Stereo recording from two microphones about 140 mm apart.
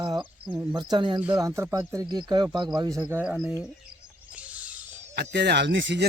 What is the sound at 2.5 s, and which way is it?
Speech, 30° right (ahead or behind).